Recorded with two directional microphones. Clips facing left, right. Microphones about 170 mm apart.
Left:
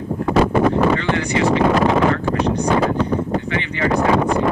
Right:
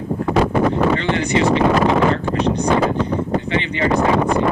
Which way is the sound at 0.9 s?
20° right (ahead or behind).